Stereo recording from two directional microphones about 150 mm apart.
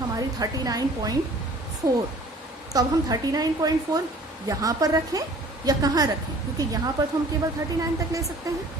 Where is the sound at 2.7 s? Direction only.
25° right (ahead or behind).